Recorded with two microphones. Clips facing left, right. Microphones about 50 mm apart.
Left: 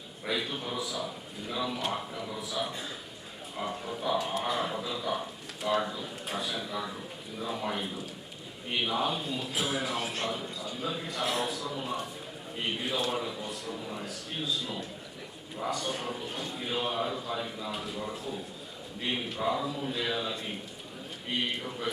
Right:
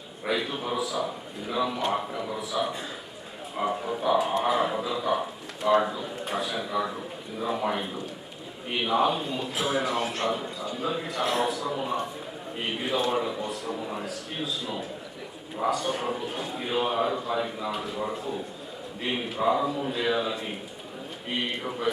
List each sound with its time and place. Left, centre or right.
0.3 s speech: centre
0.8 s speech: centre
1.0 s speech: centre
11.2 s a man's voice: centre
14.0 s speech: centre
17.7 s speech: centre